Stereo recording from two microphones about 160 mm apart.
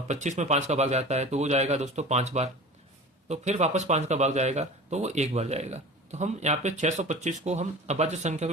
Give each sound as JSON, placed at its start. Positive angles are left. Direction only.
{"t": 0.1, "sound": "speech", "side_deg": -50}